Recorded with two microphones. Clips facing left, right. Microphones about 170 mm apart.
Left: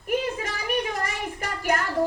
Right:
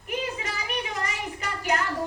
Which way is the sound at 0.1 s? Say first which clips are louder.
Left 5 dB; 50° left (ahead or behind).